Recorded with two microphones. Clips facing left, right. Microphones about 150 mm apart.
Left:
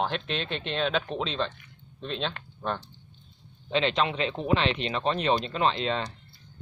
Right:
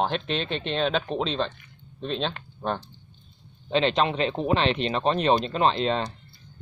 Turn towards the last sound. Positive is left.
turn(degrees=-35)  # may be behind; listen again after turning